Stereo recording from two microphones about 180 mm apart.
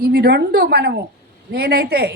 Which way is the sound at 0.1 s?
60° right (ahead or behind).